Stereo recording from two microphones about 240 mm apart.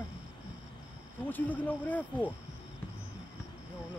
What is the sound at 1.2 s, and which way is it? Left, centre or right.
Speech, centre.